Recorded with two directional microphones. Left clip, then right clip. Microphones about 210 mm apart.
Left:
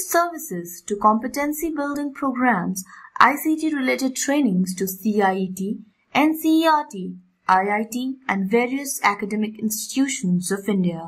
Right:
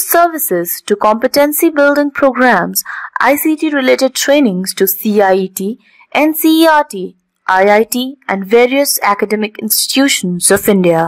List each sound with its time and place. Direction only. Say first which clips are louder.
0.1 s a woman's voice: right 11 dB; 45° right (ahead or behind)